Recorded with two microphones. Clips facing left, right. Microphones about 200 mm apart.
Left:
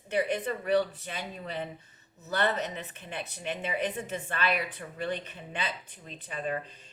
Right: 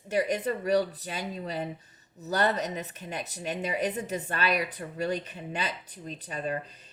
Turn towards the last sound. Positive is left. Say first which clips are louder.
# right 3 dB
turn(degrees=-40)  # may be behind; listen again after turning